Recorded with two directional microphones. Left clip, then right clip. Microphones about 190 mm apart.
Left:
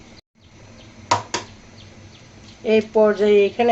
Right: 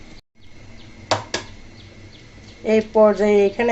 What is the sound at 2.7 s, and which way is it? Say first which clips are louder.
Speech: right 1 dB; 20° right (ahead or behind).